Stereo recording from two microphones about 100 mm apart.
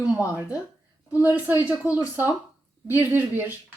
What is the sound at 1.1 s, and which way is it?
A woman's voice, 20° right (ahead or behind).